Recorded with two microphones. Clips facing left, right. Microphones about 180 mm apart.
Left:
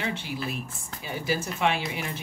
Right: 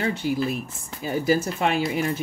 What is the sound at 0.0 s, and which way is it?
Speech, 40° right (ahead or behind).